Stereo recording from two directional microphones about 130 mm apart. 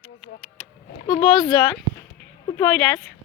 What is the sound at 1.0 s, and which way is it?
Speech, 40° left (ahead or behind).